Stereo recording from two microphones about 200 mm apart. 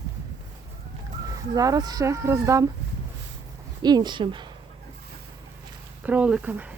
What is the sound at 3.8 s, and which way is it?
Speech, 20° right (ahead or behind).